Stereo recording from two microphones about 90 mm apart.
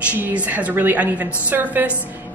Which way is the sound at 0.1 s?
15° right (ahead or behind).